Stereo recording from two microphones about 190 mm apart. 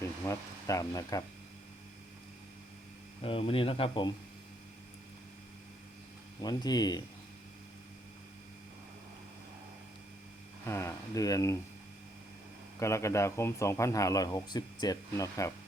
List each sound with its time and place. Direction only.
0.3 s speech: 15° left (ahead or behind)
3.2 s speech: 30° left (ahead or behind)
6.4 s speech: 20° left (ahead or behind)
10.7 s speech: 15° left (ahead or behind)
12.8 s speech: 15° left (ahead or behind)